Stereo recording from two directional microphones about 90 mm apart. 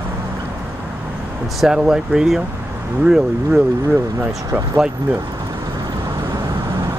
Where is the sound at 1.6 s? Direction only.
5° right (ahead or behind).